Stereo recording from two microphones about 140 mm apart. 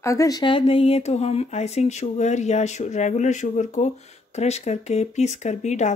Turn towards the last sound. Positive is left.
turn(degrees=55)  # may be behind; listen again after turning